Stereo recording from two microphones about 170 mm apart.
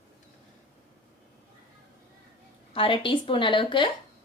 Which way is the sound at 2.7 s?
30° left (ahead or behind).